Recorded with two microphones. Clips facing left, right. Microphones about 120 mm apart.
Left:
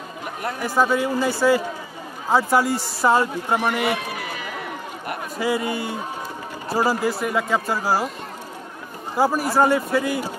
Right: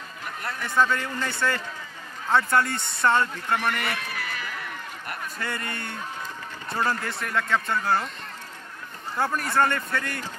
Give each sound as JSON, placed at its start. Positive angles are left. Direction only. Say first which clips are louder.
{"t": 0.4, "sound": "a man's voice", "louder": "left 3 dB", "side_deg": 15}
{"t": 9.1, "sound": "a man's voice", "louder": "left 6 dB", "side_deg": 10}